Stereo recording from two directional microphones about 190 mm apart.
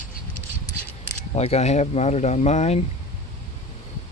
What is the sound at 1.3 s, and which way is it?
Speech, 35° left (ahead or behind).